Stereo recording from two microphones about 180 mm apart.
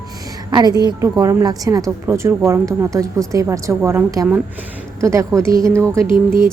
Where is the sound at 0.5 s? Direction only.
25° right (ahead or behind).